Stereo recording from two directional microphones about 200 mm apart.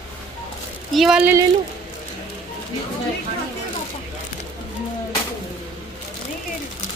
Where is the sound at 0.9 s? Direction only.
Centre (ahead or behind).